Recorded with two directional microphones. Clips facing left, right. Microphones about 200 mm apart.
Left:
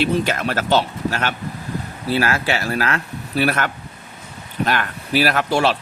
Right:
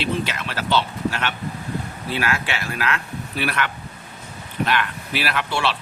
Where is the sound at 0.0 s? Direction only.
45° left (ahead or behind).